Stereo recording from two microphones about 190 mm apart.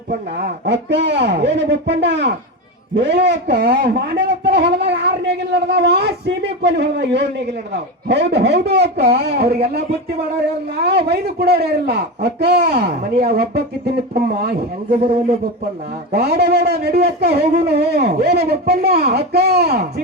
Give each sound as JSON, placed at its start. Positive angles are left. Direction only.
{"t": 0.3, "sound": "a man's voice", "side_deg": -60}
{"t": 16.1, "sound": "a man's voice", "side_deg": -55}